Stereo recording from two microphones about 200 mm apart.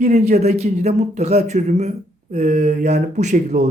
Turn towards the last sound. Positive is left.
turn(degrees=-35)  # may be behind; listen again after turning